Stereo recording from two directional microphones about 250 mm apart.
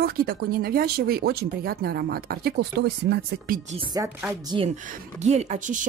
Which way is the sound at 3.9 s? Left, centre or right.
Centre.